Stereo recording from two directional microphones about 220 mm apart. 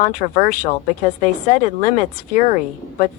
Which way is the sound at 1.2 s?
35° left (ahead or behind).